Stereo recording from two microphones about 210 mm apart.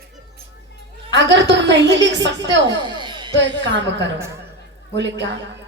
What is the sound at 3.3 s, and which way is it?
A woman's voice, 55° right (ahead or behind).